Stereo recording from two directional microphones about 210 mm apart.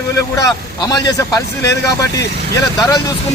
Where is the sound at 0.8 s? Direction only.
20° left (ahead or behind).